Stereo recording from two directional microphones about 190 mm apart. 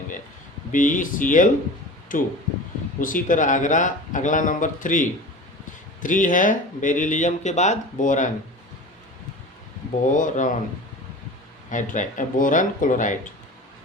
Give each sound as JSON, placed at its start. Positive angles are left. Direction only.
{"t": 0.7, "sound": "speech", "side_deg": 45}
{"t": 10.1, "sound": "speech", "side_deg": 45}
{"t": 11.7, "sound": "speech", "side_deg": 40}